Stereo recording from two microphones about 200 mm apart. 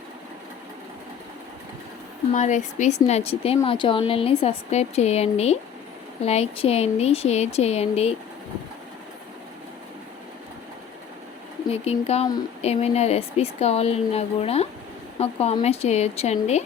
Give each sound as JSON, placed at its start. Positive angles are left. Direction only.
{"t": 2.3, "sound": "speech", "side_deg": 35}
{"t": 11.7, "sound": "speech", "side_deg": 30}